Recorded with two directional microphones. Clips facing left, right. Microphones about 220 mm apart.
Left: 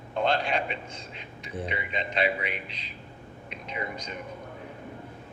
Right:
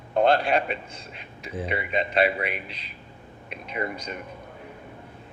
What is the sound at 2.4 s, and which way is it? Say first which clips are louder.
Speech: right 4 dB; 5° right (ahead or behind).